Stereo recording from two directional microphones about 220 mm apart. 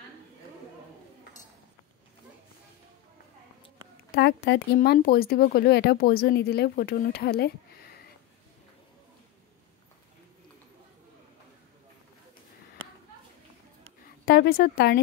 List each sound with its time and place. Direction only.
4.1 s a woman's voice: 50° left (ahead or behind)
14.2 s speech: 45° left (ahead or behind)